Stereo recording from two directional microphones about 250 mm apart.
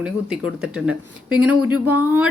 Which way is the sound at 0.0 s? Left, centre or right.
Centre.